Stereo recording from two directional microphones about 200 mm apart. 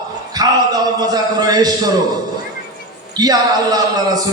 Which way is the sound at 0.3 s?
20° right (ahead or behind).